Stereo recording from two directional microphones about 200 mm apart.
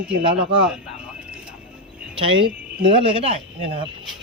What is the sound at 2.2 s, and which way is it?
Speech, 25° right (ahead or behind).